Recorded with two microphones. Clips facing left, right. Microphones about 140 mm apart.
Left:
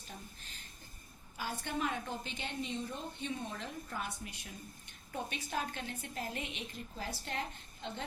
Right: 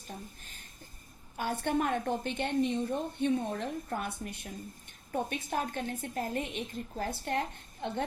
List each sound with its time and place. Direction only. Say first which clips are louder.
1.4 s a woman's voice: right 7 dB; 55° right (ahead or behind)